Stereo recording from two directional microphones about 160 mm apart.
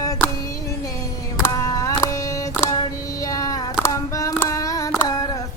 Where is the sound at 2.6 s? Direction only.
20° left (ahead or behind).